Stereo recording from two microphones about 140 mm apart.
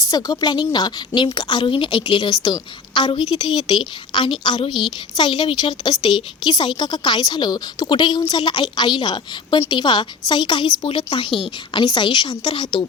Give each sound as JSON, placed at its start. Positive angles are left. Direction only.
{"t": 0.1, "sound": "a woman's voice", "side_deg": 30}